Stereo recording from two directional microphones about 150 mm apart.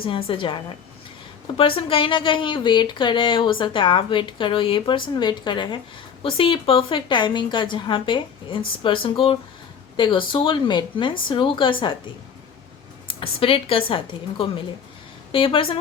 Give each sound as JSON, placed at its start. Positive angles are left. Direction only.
{"t": 0.0, "sound": "speech", "side_deg": 35}
{"t": 13.1, "sound": "speech", "side_deg": 40}